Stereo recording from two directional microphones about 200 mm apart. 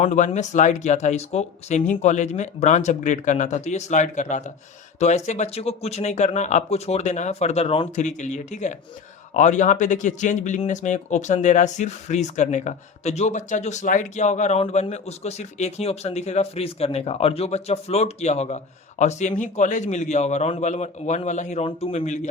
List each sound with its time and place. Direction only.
0.0 s speech: 35° left (ahead or behind)